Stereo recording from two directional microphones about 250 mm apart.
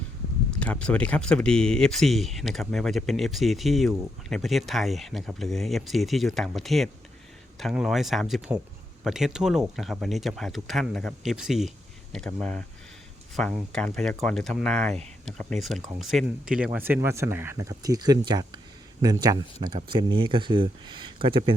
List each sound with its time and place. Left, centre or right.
0.5 s speech: centre; by 21.5 s right